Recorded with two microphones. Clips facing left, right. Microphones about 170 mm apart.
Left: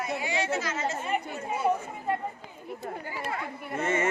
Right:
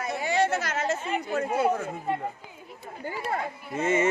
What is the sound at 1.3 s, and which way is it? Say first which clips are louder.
Speech: right 6 dB; 90° right.